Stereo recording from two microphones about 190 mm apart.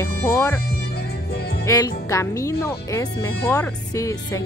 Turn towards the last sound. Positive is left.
turn(degrees=15)  # may be behind; listen again after turning